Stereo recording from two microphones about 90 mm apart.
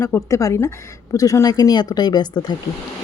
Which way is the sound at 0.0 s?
35° left (ahead or behind).